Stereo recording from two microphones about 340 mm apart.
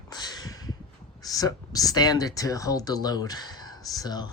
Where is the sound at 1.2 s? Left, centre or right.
Centre.